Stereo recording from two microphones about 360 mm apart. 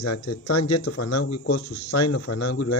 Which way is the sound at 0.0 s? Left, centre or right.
Left.